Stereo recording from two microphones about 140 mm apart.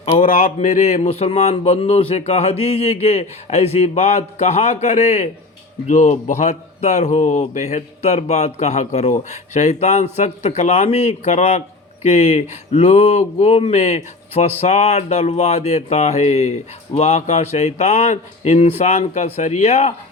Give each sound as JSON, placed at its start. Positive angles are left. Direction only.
{"t": 0.2, "sound": "speech", "side_deg": 65}